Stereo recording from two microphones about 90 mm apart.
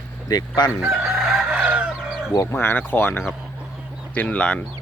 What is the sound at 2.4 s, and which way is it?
Speech, 25° left (ahead or behind).